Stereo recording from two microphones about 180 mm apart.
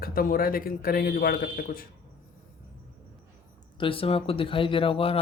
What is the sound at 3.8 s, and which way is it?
Speech, 30° left (ahead or behind).